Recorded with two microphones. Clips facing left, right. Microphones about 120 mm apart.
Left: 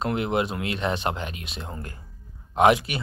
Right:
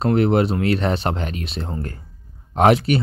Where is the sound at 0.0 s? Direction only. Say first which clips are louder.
Right 8 dB; 40° right (ahead or behind).